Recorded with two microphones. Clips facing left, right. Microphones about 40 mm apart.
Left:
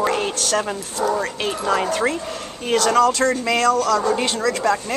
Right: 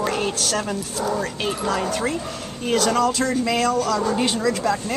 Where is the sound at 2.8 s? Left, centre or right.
Centre.